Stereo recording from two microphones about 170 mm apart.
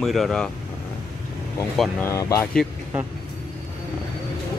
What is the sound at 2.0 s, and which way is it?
Speech, 20° left (ahead or behind).